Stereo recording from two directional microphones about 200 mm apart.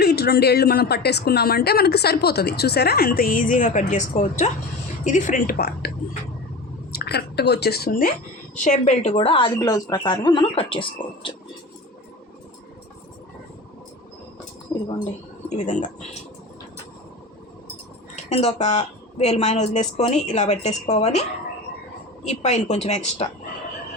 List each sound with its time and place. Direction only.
0.0 s speech: 50° left (ahead or behind)
6.9 s a woman's voice: 50° left (ahead or behind); by 11.3 s 25° left (ahead or behind)
14.7 s speech: 15° left (ahead or behind)
15.4 s speech: 35° left (ahead or behind)
18.3 s speech: 35° left (ahead or behind)